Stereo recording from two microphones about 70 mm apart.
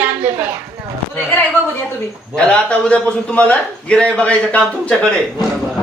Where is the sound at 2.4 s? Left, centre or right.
Centre.